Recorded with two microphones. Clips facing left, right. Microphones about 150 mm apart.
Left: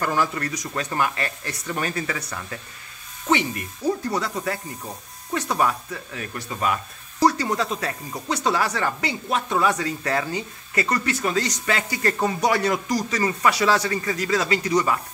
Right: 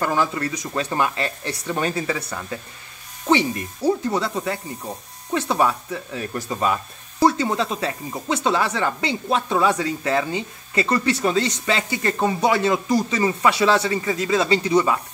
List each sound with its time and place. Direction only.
0.0 s speech: 25° right (ahead or behind)